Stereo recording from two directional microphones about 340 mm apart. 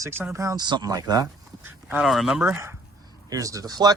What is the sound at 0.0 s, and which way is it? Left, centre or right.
Speech, centre.